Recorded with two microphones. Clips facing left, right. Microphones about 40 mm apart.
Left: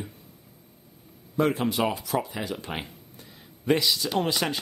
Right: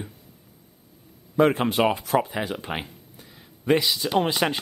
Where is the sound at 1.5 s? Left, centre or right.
Right.